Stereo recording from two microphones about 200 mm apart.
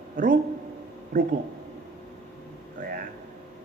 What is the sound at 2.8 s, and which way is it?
Speech, 50° right (ahead or behind).